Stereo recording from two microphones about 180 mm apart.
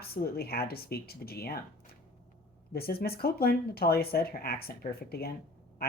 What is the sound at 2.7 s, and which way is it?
Speech, 60° left (ahead or behind).